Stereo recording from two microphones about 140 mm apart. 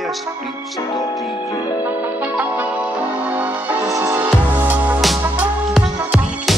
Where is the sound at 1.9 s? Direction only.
10° right (ahead or behind).